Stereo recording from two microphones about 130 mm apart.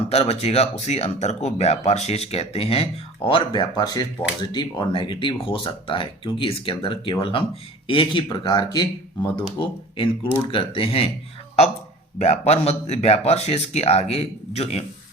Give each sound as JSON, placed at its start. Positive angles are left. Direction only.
{"t": 0.1, "sound": "speech", "side_deg": 50}
{"t": 12.2, "sound": "speech", "side_deg": 55}